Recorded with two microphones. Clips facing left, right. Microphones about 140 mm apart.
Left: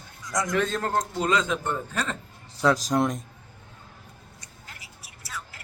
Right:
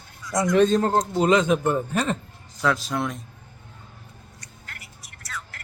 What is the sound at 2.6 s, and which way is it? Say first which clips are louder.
Speech: left 2 dB; 40° left (ahead or behind).